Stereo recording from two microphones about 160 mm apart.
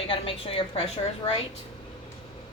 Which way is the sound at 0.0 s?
35° left (ahead or behind).